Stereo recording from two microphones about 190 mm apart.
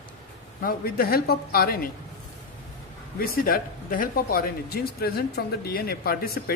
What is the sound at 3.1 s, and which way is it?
Speech, 50° left (ahead or behind).